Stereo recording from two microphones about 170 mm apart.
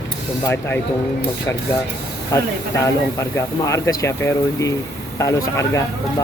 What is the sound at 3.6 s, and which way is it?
Speech, 20° left (ahead or behind).